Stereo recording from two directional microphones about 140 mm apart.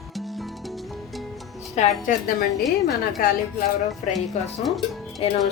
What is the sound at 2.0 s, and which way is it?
Speech, 90° left.